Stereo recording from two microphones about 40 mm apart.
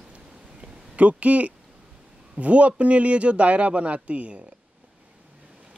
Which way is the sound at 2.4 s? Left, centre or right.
Right.